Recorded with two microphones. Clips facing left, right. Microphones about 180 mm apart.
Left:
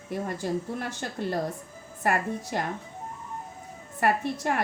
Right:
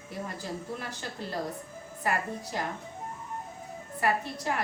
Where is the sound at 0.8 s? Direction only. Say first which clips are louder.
Left 6 dB; 55° left (ahead or behind).